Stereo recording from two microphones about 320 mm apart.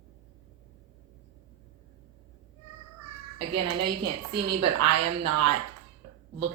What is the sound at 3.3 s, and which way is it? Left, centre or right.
A woman's voice, right.